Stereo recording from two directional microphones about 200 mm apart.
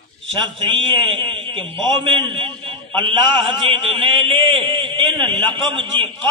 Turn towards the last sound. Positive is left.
turn(degrees=-25)  # may be behind; listen again after turning